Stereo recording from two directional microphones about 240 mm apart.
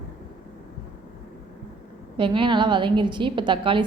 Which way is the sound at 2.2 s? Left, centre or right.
Right.